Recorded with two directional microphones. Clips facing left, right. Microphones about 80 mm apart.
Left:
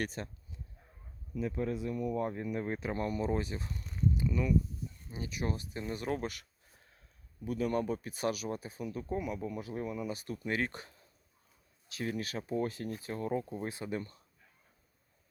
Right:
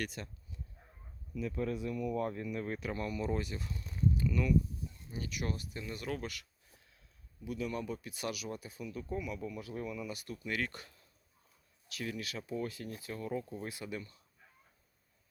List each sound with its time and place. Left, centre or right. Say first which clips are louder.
0.0 s speech: left 3 dB; left
1.3 s speech: left 2 dB; left
4.2 s speech: even; centre; by 9.4 s left
9.4 s speech: left 3 dB; left